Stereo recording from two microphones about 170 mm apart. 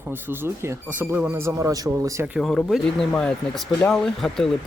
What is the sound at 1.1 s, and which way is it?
Speech, 15° right (ahead or behind).